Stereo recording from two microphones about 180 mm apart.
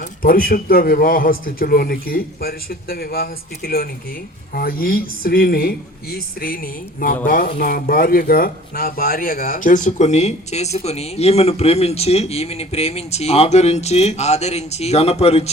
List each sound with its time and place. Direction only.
0.0 s a man's voice: 55° left (ahead or behind); by 15.4 s 35° left (ahead or behind)